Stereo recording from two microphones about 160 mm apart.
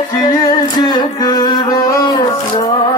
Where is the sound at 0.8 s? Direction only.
25° left (ahead or behind).